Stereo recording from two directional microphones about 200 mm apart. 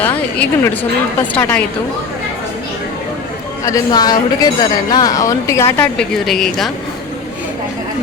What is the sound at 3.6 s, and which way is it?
Speech, 15° left (ahead or behind).